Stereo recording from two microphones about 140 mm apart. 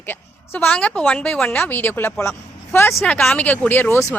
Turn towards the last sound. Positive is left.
turn(degrees=20)  # may be behind; listen again after turning